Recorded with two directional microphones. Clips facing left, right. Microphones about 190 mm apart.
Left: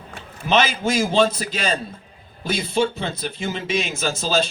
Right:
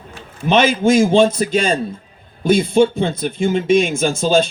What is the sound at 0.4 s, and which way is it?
A man's voice, 50° right (ahead or behind).